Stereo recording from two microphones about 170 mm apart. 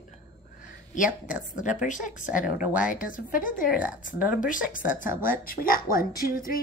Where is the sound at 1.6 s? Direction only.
45° left (ahead or behind).